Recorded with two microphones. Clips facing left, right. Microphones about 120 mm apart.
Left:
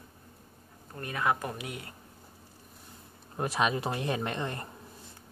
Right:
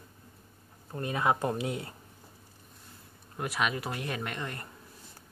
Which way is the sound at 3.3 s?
30° left (ahead or behind).